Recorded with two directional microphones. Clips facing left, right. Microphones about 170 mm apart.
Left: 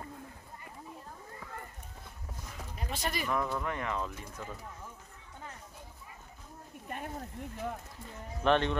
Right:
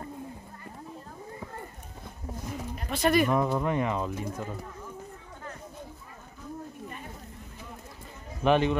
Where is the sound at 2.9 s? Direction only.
60° right (ahead or behind).